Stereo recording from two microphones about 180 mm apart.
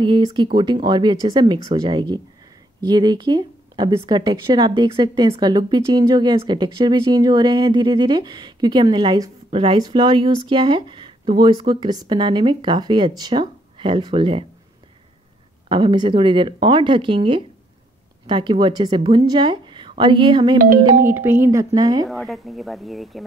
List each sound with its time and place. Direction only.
0.0 s a woman's voice: 25° right (ahead or behind)
15.7 s a woman's voice: 25° right (ahead or behind)
20.5 s speech: 50° right (ahead or behind)
21.1 s speech: 15° right (ahead or behind)
22.0 s speech: centre (ahead or behind)